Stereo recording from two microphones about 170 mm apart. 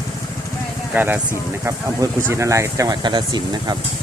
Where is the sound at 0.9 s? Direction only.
10° right (ahead or behind).